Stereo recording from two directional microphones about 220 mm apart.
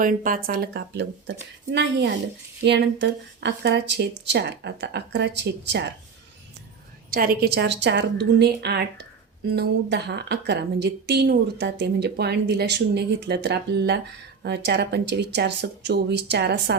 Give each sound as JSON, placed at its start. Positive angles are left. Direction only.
{"t": 0.0, "sound": "a woman's voice", "side_deg": -40}
{"t": 7.1, "sound": "a woman's voice", "side_deg": -40}